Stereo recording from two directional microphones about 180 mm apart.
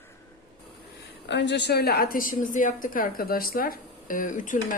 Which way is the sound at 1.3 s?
75° left (ahead or behind).